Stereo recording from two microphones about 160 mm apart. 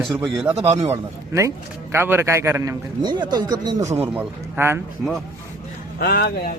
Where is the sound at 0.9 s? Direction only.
20° right (ahead or behind).